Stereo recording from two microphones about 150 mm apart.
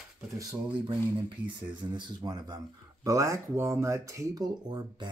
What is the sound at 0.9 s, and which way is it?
Speech, 30° right (ahead or behind).